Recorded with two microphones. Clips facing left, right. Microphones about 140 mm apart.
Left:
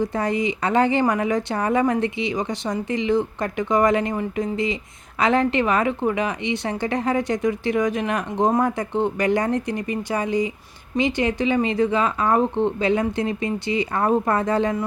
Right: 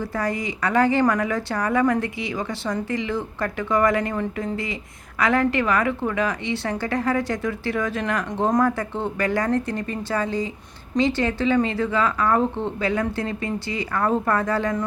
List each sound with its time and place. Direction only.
0.0 s speech: 20° left (ahead or behind)